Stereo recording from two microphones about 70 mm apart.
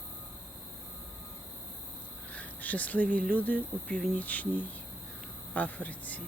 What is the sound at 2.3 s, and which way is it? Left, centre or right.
Speech, left.